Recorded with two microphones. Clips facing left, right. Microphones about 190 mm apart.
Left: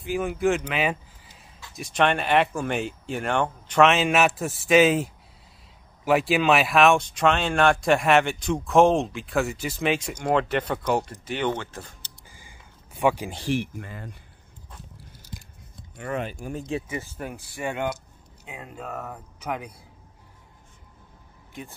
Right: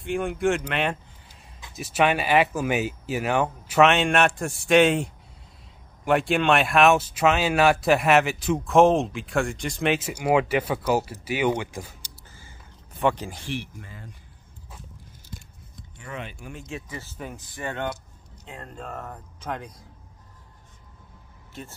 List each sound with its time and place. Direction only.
0.0 s speech: centre (ahead or behind)
12.3 s a sound: 15° left (ahead or behind)
13.3 s speech: 35° left (ahead or behind)
13.6 s speech: 60° left (ahead or behind)
16.0 s speech: 50° left (ahead or behind)
16.9 s speech: 10° left (ahead or behind)